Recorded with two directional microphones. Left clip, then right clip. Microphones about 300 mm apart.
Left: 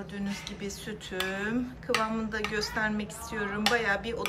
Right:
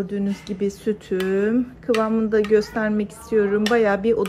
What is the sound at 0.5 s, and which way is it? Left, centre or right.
A woman's voice, centre.